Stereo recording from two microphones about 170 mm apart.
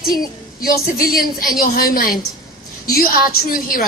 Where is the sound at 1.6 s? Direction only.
60° left (ahead or behind).